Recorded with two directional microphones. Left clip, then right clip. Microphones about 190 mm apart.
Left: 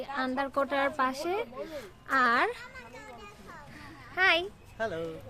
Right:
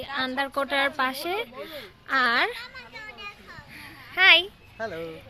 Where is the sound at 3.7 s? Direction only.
10° right (ahead or behind).